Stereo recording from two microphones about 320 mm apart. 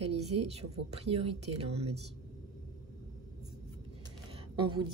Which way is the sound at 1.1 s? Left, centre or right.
Centre.